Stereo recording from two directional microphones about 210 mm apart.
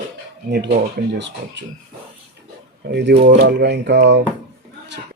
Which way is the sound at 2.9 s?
55° right (ahead or behind).